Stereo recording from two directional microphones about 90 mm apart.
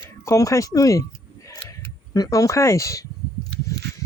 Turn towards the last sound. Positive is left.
turn(degrees=35)  # may be behind; listen again after turning